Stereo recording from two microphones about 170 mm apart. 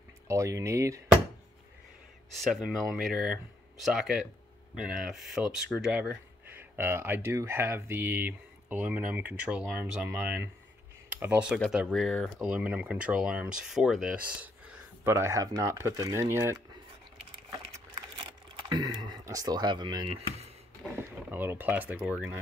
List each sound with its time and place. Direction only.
0.3 s speech: 20° right (ahead or behind)
2.4 s speech: centre (ahead or behind)
18.7 s speech: 25° right (ahead or behind)
20.9 s speech: 15° right (ahead or behind)